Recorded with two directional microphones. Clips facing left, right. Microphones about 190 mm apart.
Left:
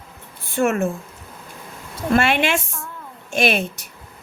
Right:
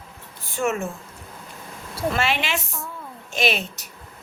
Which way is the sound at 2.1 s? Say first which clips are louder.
Left 10 dB; 55° left (ahead or behind).